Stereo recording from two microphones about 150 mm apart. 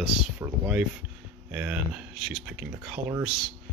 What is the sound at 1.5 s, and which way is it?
Speech, 10° right (ahead or behind).